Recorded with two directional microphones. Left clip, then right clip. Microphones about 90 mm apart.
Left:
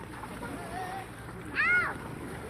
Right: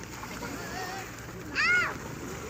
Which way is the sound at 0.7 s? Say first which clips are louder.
Left 1 dB; 20° right (ahead or behind).